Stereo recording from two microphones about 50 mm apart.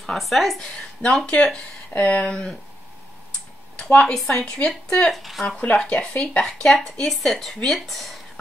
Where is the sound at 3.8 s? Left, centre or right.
Left.